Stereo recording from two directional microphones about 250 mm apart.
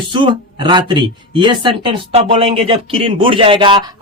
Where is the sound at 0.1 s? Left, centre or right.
Centre.